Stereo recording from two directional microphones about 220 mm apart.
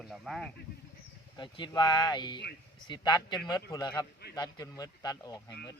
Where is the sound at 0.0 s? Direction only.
Centre (ahead or behind).